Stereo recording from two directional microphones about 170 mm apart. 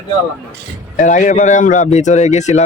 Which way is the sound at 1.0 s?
50° left (ahead or behind).